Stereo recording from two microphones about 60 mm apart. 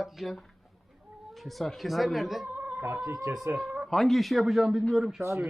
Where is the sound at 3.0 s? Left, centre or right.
Right.